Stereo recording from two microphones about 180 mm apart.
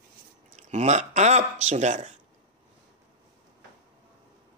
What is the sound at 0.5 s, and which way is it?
Speech, 40° right (ahead or behind).